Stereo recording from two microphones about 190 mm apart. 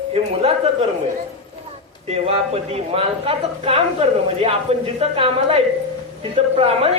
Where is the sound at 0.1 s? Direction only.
30° right (ahead or behind).